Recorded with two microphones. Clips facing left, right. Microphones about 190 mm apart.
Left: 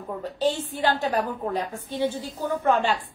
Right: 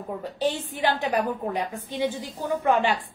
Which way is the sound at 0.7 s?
15° right (ahead or behind).